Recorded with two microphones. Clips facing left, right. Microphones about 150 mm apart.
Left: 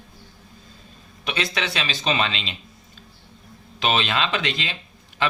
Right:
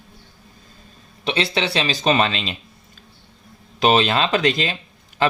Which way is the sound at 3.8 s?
40° right (ahead or behind).